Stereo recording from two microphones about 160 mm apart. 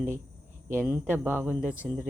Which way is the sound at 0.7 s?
10° right (ahead or behind).